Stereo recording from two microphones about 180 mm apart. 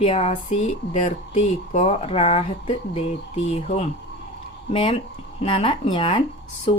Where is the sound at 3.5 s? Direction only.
35° left (ahead or behind).